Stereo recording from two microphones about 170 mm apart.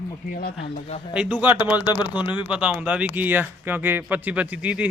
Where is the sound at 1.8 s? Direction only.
25° left (ahead or behind).